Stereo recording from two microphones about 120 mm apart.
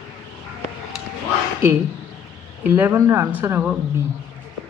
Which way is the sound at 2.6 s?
20° right (ahead or behind).